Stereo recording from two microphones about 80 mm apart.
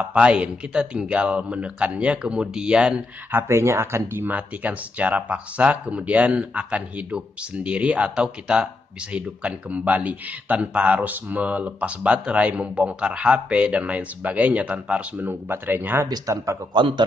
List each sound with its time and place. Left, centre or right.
0.1 s speech: centre
3.4 s speech: right; by 15.3 s centre
15.4 s speech: right
16.1 s speech: right
16.7 s a man's voice: right